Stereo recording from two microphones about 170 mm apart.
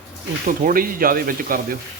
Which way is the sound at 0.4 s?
55° right (ahead or behind).